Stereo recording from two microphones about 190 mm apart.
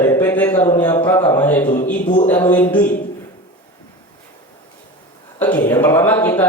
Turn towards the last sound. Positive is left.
turn(degrees=10)  # may be behind; listen again after turning